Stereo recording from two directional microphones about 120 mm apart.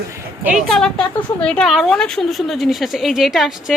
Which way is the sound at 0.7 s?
5° left (ahead or behind).